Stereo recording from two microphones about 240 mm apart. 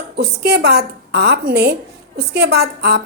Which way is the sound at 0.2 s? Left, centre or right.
Right.